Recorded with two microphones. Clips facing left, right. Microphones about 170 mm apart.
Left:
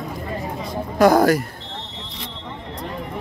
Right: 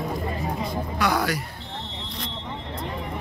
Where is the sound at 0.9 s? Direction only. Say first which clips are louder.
Left 11 dB; 45° left (ahead or behind).